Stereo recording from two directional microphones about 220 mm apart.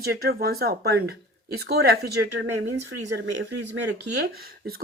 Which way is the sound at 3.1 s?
50° right (ahead or behind).